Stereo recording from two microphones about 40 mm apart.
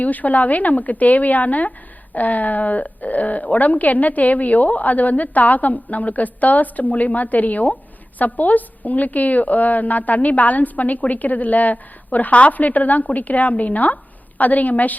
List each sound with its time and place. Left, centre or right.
0.0 s a woman's voice: left